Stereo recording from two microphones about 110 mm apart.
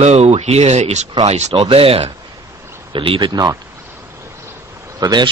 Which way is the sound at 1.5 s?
60° right (ahead or behind).